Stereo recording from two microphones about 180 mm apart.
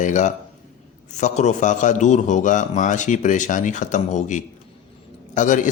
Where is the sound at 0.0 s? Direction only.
45° left (ahead or behind).